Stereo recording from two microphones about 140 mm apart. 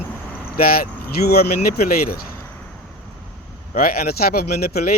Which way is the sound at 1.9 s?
90° left.